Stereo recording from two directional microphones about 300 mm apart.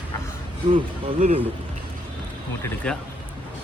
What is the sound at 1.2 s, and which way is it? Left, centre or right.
Speech, right.